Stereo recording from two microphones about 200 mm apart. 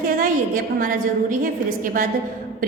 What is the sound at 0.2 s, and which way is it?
A woman's voice, 45° right (ahead or behind).